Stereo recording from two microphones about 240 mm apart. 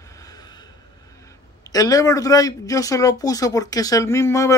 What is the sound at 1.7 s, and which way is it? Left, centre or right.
Speech, centre.